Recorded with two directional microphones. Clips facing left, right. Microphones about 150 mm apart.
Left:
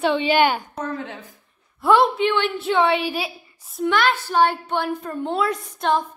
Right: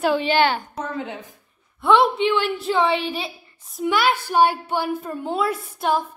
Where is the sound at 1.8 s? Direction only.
Centre (ahead or behind).